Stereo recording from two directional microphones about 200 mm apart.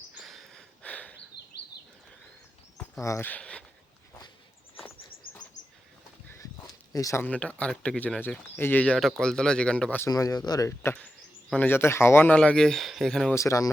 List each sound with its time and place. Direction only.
0.2 s a sound: centre (ahead or behind)
3.0 s speech: 15° left (ahead or behind)
6.9 s speech: 15° left (ahead or behind)
13.3 s speech: 15° left (ahead or behind)